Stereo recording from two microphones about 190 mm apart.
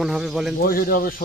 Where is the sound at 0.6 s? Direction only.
50° left (ahead or behind).